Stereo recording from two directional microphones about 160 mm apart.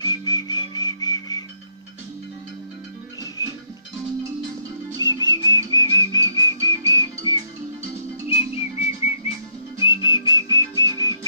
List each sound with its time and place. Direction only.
0.0 s whistle: 25° left (ahead or behind)
3.4 s music: 20° left (ahead or behind)
5.0 s music: 25° left (ahead or behind)
8.3 s whistling: 40° left (ahead or behind)
9.8 s music: 30° left (ahead or behind)